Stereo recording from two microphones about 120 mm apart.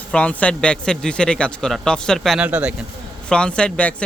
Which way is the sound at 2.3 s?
10° right (ahead or behind).